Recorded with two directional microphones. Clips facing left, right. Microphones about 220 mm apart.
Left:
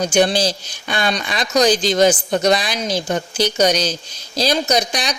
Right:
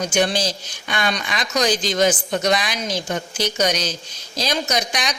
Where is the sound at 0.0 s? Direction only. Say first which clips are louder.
Left 4 dB; 35° left (ahead or behind).